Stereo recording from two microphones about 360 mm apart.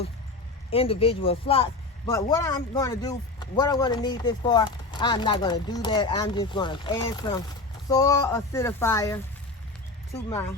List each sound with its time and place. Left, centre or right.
0.7 s speech: centre